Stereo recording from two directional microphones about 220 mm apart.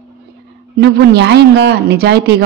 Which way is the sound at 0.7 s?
50° right (ahead or behind).